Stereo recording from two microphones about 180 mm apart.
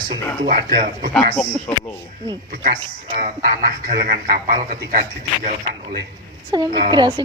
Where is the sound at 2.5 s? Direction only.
45° right (ahead or behind).